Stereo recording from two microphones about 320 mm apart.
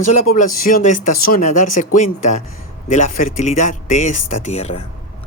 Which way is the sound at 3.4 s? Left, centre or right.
Left.